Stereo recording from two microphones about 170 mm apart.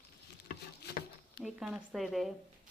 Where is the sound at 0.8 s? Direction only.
70° left (ahead or behind).